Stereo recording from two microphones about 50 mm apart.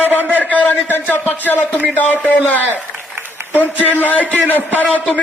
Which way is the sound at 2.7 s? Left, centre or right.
Right.